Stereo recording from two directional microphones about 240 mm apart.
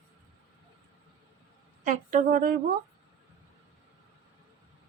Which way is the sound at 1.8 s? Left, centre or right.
Right.